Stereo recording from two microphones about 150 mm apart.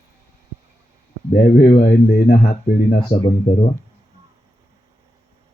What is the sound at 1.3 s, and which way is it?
Speech, 70° left (ahead or behind).